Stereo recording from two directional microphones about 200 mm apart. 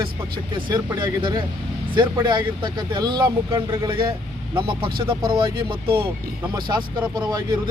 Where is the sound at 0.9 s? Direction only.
20° right (ahead or behind).